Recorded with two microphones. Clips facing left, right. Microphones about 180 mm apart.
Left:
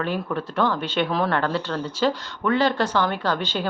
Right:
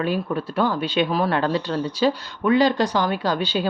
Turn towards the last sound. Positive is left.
turn(degrees=-10)  # may be behind; listen again after turning